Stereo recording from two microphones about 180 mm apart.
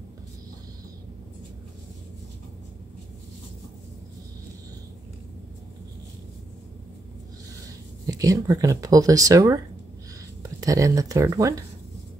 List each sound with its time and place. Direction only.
7.6 s speech: 20° right (ahead or behind)